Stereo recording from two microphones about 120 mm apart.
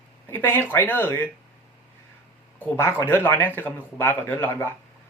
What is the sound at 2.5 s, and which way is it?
Speech, 20° left (ahead or behind).